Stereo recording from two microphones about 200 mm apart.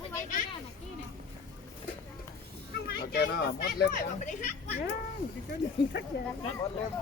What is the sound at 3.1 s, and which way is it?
Speech, 50° left (ahead or behind).